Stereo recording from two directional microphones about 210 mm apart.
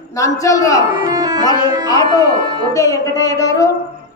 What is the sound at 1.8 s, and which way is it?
A man's voice, 15° left (ahead or behind).